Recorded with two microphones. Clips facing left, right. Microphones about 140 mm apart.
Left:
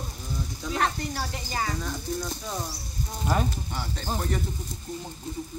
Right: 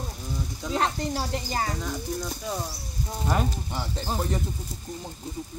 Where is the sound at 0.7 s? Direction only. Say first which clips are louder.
Right 2 dB; 30° right (ahead or behind).